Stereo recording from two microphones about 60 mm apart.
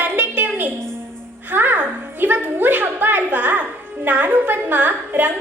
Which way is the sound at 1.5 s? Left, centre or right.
Right.